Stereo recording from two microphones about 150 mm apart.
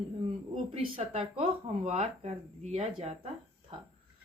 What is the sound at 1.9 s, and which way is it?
Speech, 45° right (ahead or behind).